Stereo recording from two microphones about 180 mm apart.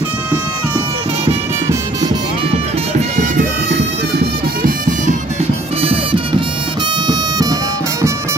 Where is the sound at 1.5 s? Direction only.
20° right (ahead or behind).